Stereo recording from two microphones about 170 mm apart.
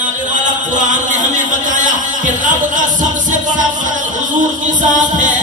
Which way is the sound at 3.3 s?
50° right (ahead or behind).